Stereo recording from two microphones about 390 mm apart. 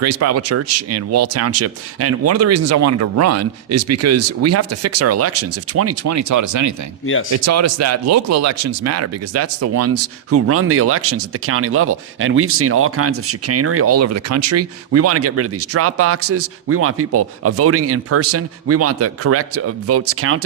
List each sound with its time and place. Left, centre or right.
0.0 s speech: right